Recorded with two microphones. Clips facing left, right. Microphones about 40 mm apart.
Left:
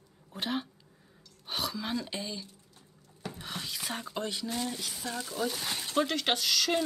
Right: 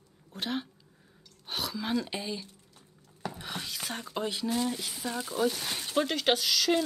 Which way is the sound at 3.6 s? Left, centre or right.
Centre.